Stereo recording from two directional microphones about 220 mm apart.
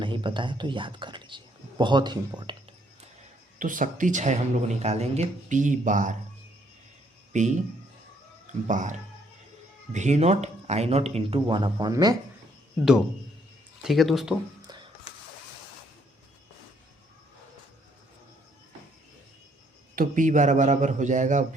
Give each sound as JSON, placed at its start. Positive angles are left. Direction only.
{"t": 0.0, "sound": "speech", "side_deg": -20}
{"t": 3.6, "sound": "a man's voice", "side_deg": -35}
{"t": 7.3, "sound": "a man's voice", "side_deg": -35}
{"t": 8.6, "sound": "a man's voice", "side_deg": -35}
{"t": 13.8, "sound": "speech", "side_deg": 0}
{"t": 14.7, "sound": "a sound", "side_deg": -20}
{"t": 20.0, "sound": "a man's voice", "side_deg": -35}